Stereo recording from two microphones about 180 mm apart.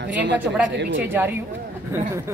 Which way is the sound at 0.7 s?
75° right (ahead or behind).